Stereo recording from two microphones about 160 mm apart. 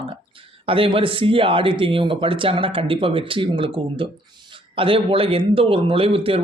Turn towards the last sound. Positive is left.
turn(degrees=-35)  # may be behind; listen again after turning